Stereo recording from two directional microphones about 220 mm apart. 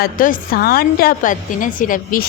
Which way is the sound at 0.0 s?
40° left (ahead or behind).